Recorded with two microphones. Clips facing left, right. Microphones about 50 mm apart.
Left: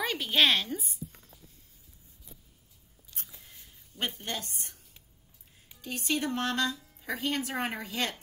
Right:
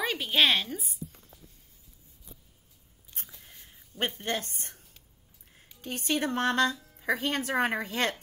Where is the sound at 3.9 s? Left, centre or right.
Right.